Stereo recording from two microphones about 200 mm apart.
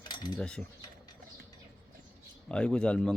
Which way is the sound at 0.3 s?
5° left (ahead or behind).